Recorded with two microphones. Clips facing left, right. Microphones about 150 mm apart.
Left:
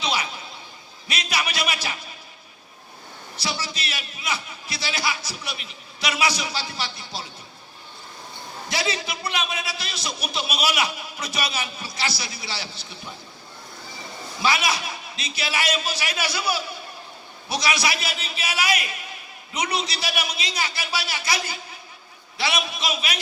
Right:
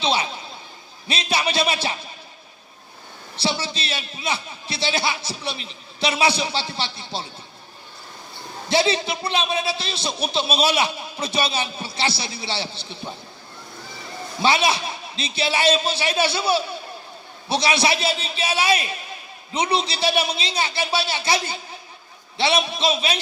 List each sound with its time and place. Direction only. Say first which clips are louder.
0.0 s a man's voice: right 4 dB; 30° right (ahead or behind)
3.3 s a man's voice: right 5 dB; 30° right (ahead or behind)
8.7 s a man's voice: right 8 dB; 30° right (ahead or behind)
14.4 s a man's voice: right 4 dB; 30° right (ahead or behind)